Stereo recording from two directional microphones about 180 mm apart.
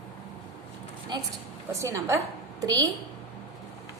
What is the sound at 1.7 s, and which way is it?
A woman's voice, 15° right (ahead or behind).